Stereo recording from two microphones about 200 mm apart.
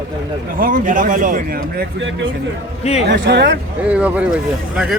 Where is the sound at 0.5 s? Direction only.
45° right (ahead or behind).